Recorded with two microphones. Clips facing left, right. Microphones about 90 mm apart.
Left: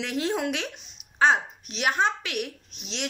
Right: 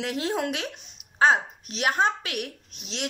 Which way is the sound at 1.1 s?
35° right (ahead or behind).